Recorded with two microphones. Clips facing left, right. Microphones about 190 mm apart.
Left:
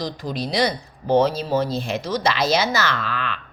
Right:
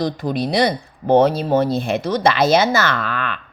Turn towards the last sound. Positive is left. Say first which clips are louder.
# right 3 dB
turn(degrees=-55)  # may be behind; listen again after turning